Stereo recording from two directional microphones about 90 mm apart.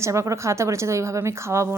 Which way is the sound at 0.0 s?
35° right (ahead or behind).